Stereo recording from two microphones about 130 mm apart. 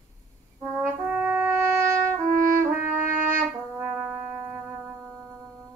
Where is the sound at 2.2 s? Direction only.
90° right.